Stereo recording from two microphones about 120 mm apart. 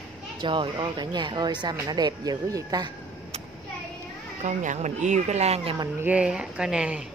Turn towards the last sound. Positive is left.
turn(degrees=-10)  # may be behind; listen again after turning